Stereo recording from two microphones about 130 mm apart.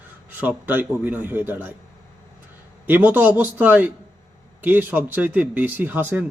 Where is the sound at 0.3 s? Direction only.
15° right (ahead or behind).